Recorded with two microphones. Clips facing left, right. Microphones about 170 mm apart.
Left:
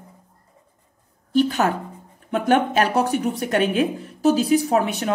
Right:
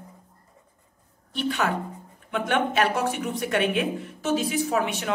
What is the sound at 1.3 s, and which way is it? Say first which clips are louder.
A woman's voice: left 7 dB; 40° left (ahead or behind).